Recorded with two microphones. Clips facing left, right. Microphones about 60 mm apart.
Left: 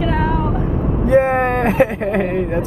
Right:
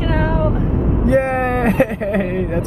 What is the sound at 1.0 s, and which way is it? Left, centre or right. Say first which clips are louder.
Speech: left 3 dB; centre.